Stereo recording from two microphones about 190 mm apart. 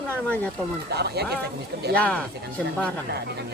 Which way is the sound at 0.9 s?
60° right (ahead or behind).